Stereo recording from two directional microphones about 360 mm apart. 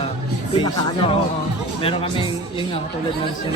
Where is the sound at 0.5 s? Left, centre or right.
Centre.